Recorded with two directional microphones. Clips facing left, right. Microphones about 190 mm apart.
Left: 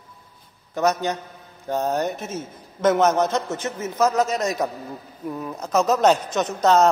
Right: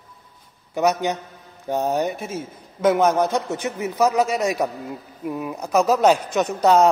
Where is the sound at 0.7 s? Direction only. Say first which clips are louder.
Right 1 dB; 15° right (ahead or behind).